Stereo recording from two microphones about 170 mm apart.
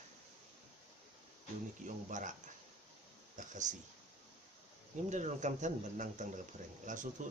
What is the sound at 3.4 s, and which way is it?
Speech, 45° right (ahead or behind).